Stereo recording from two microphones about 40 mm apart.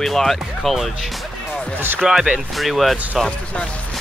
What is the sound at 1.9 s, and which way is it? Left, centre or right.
Speech, centre.